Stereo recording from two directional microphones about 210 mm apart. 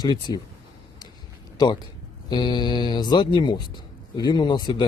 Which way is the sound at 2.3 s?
20° left (ahead or behind).